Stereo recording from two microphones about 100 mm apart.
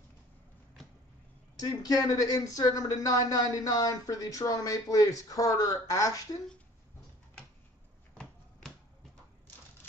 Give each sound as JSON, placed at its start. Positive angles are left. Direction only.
{"t": 1.6, "sound": "speech", "side_deg": 40}